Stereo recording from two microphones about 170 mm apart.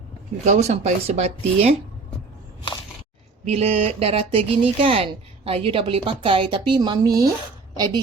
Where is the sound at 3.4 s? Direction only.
35° right (ahead or behind); by 7.3 s 20° right (ahead or behind).